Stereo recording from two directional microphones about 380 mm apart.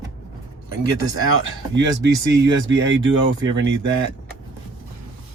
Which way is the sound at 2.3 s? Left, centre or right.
Right.